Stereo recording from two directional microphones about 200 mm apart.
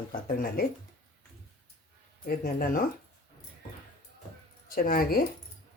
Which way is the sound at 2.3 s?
45° left (ahead or behind).